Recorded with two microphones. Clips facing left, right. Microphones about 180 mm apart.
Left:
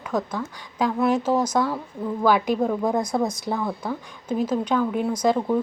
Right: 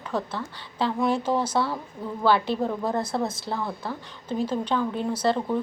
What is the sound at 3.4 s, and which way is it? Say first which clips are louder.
A woman's voice: left 4 dB; 15° left (ahead or behind).